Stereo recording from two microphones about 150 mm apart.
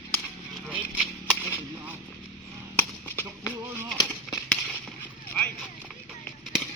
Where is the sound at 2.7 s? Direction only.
15° left (ahead or behind).